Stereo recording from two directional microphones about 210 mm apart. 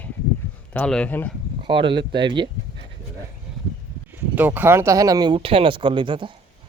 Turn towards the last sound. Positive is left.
turn(degrees=-25)  # may be behind; listen again after turning